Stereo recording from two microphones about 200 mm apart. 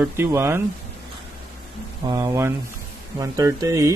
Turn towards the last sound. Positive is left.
turn(degrees=-15)  # may be behind; listen again after turning